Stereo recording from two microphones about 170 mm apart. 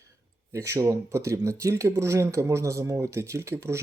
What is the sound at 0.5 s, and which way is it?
Speech, 20° right (ahead or behind).